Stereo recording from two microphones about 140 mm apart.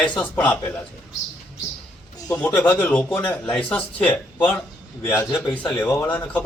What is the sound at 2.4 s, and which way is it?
A man's voice, 10° left (ahead or behind).